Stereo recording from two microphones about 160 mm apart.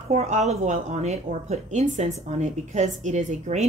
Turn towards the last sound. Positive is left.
turn(degrees=-45)  # may be behind; listen again after turning